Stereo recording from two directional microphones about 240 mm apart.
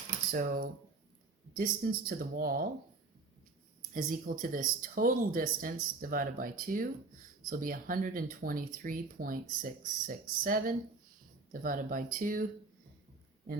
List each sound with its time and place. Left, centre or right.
0.3 s speech: right
3.9 s speech: right